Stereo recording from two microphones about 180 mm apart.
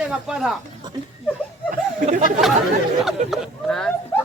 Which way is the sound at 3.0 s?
Centre (ahead or behind).